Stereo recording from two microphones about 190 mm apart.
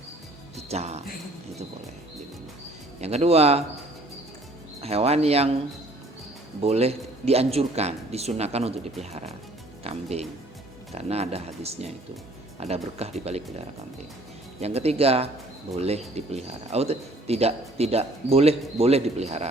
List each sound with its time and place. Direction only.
0.5 s music: 35° right (ahead or behind)
3.0 s speech: 35° right (ahead or behind)
4.8 s speech: 30° right (ahead or behind)
6.6 s speech: 35° right (ahead or behind)
14.6 s speech: 35° right (ahead or behind)